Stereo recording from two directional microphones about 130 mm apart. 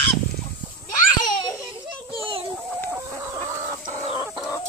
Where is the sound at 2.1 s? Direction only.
40° right (ahead or behind).